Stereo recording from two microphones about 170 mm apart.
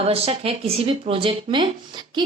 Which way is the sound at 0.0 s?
35° right (ahead or behind).